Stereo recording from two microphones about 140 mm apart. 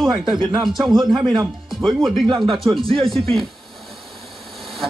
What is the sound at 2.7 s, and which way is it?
Speech, 40° right (ahead or behind).